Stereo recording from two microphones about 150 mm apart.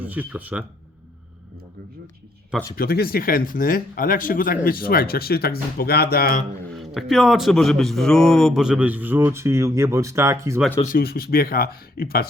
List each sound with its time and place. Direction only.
0.0 s speech: 10° right (ahead or behind)
2.7 s speech: 85° left
6.7 s speech: centre (ahead or behind); by 10.6 s 20° right (ahead or behind)
10.8 s speech: 85° left